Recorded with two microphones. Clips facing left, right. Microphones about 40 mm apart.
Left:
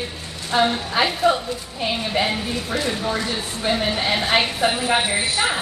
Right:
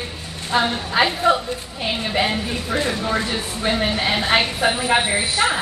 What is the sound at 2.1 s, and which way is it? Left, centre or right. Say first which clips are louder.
A woman's voice: right 3 dB; centre.